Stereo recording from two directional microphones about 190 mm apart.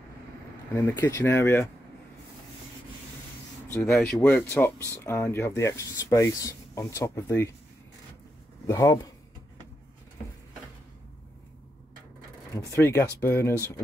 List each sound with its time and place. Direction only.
0.7 s speech: 10° left (ahead or behind)
3.8 s speech: centre (ahead or behind)
8.6 s speech: 15° left (ahead or behind)
12.5 s speech: 15° left (ahead or behind)